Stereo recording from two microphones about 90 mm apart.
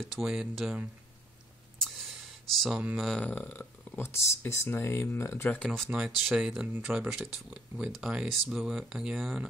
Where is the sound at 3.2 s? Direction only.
20° left (ahead or behind).